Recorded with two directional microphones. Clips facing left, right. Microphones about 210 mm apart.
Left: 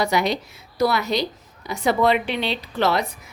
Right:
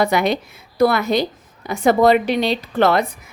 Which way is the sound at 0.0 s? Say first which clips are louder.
Right 4 dB; 55° right (ahead or behind).